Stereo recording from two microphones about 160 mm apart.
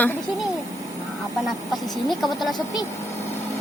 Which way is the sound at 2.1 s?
Centre (ahead or behind).